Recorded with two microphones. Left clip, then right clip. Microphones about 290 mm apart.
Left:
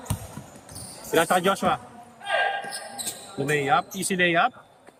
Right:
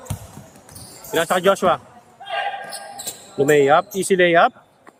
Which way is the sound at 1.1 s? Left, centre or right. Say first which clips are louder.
Right 4 dB; centre.